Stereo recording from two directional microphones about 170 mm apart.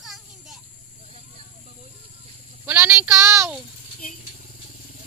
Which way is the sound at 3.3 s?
15° right (ahead or behind).